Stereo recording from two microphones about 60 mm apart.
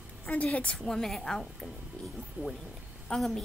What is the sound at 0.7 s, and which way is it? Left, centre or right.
Speech, centre.